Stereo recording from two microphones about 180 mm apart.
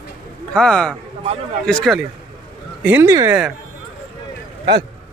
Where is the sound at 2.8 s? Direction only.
10° right (ahead or behind).